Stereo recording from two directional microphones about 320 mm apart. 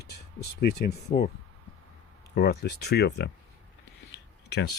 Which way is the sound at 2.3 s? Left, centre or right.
Left.